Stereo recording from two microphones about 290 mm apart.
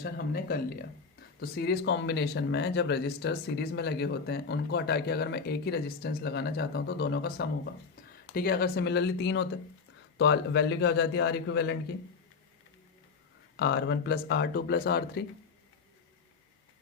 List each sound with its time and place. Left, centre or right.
0.0 s speech: left
13.6 s speech: left